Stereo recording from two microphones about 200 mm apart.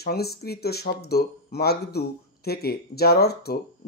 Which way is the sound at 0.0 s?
50° left (ahead or behind).